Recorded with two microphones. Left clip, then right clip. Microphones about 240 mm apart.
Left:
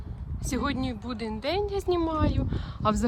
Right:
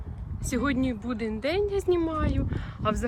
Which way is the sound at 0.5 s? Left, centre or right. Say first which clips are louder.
Right 2 dB; centre.